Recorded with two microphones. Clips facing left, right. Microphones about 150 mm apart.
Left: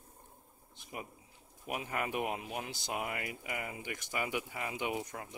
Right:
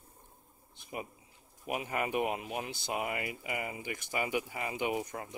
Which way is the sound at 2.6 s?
60° right (ahead or behind).